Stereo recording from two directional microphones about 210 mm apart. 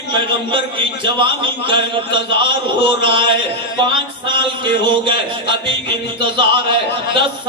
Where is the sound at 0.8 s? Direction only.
25° right (ahead or behind).